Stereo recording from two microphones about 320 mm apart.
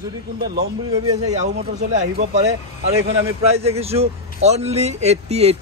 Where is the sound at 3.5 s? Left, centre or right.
Centre.